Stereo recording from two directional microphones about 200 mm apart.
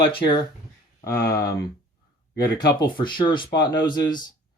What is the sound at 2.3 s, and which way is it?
Speech, 20° left (ahead or behind).